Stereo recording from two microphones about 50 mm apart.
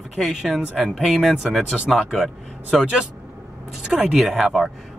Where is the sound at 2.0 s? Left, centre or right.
Centre.